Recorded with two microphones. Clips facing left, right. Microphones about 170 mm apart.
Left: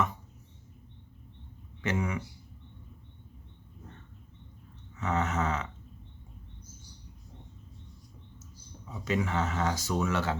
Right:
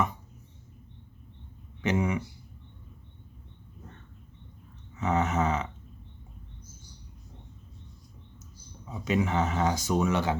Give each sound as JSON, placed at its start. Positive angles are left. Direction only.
{"t": 1.8, "sound": "speech", "side_deg": -20}
{"t": 4.9, "sound": "speech", "side_deg": -15}
{"t": 8.9, "sound": "speech", "side_deg": -15}